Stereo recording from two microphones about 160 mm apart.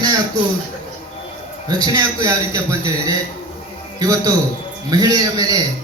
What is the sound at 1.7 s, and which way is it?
A man's voice, 25° right (ahead or behind).